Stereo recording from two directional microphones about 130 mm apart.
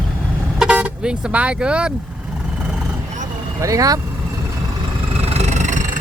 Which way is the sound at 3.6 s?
25° right (ahead or behind).